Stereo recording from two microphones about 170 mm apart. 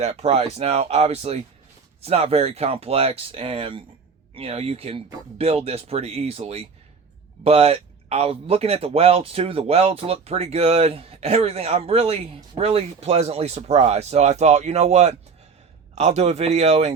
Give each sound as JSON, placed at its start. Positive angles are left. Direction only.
{"t": 0.0, "sound": "speech", "side_deg": -35}